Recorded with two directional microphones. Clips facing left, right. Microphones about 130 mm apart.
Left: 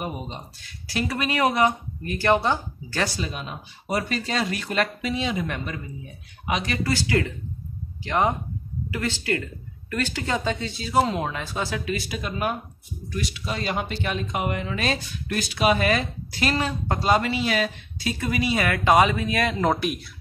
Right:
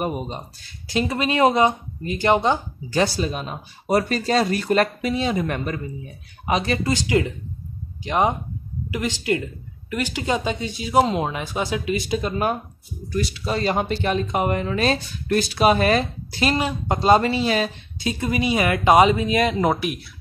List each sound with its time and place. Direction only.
0.0 s speech: 50° right (ahead or behind)
0.7 s speech: 25° right (ahead or behind)
3.1 s speech: 40° right (ahead or behind)
6.4 s speech: 35° right (ahead or behind)
12.2 s speech: 35° right (ahead or behind)
16.5 s speech: 15° right (ahead or behind)
17.1 s speech: 30° right (ahead or behind)
19.7 s speech: centre (ahead or behind)